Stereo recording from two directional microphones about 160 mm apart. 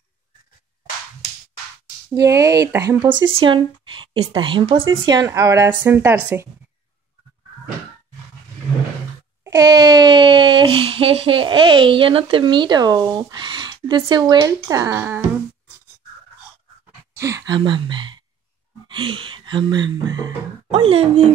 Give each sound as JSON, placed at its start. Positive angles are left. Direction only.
{"t": 2.0, "sound": "speech", "side_deg": -20}
{"t": 9.4, "sound": "speech", "side_deg": -20}
{"t": 17.1, "sound": "a sound", "side_deg": -15}
{"t": 17.6, "sound": "speech", "side_deg": -30}